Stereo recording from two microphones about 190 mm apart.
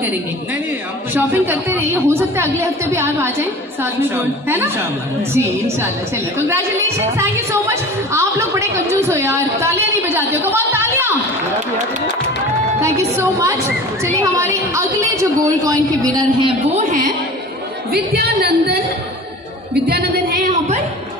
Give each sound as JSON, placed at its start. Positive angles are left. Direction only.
{"t": 1.1, "sound": "a woman's voice", "side_deg": -10}
{"t": 7.2, "sound": "a woman's voice", "side_deg": -15}
{"t": 12.8, "sound": "a woman's voice", "side_deg": -15}
{"t": 17.9, "sound": "speech", "side_deg": -55}